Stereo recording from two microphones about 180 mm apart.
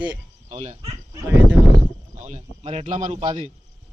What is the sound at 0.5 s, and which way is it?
Speech, 35° right (ahead or behind).